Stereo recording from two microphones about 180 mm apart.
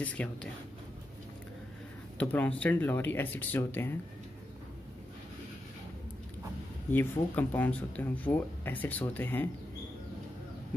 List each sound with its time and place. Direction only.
0.0 s speech: 5° left (ahead or behind)
2.1 s speech: 10° left (ahead or behind)
6.9 s speech: 10° left (ahead or behind)